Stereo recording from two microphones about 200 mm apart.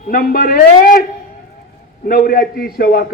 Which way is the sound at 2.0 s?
45° left (ahead or behind).